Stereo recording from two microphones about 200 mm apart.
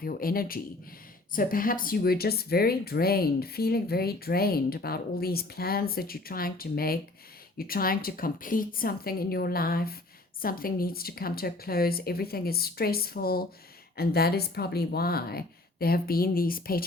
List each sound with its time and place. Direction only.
0.0 s speech: 45° left (ahead or behind)